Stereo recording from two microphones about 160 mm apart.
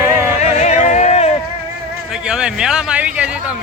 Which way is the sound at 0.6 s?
45° left (ahead or behind).